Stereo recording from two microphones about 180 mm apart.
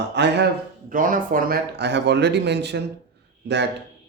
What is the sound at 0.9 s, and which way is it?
Speech, 50° right (ahead or behind).